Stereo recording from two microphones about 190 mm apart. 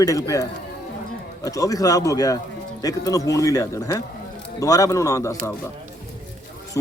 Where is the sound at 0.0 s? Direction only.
15° left (ahead or behind).